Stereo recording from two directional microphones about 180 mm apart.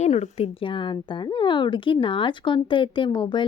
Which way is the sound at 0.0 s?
35° left (ahead or behind).